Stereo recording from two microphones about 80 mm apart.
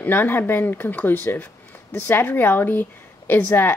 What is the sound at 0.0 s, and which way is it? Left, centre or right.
Speech, left.